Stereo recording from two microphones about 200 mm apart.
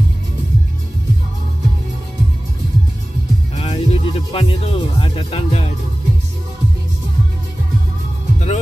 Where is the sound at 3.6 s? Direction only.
30° left (ahead or behind).